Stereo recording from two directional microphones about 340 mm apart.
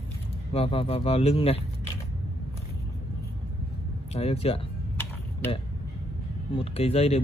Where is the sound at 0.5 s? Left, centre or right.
Centre.